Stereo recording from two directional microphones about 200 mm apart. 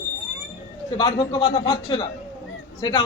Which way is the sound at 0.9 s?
20° left (ahead or behind).